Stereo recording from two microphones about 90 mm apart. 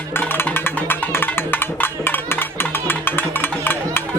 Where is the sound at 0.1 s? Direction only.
25° left (ahead or behind).